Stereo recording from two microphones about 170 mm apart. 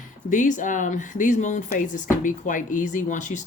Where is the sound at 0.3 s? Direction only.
45° left (ahead or behind).